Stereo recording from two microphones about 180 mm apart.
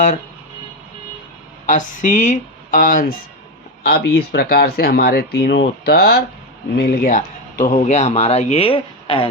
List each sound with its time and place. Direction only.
1.6 s speech: 45° left (ahead or behind); by 9.2 s 30° left (ahead or behind)